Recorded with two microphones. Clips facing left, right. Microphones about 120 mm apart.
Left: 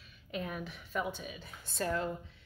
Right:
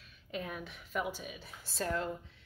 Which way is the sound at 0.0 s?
Centre (ahead or behind).